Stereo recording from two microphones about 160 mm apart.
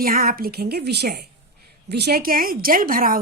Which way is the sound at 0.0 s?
65° right (ahead or behind).